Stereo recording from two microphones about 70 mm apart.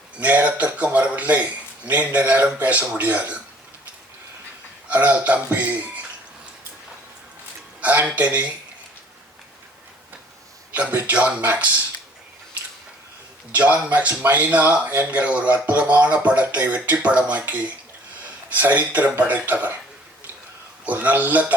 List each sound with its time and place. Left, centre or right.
0.2 s speech: right
4.9 s speech: right
7.8 s speech: right
10.8 s speech: right
13.5 s speech: right
20.8 s speech: right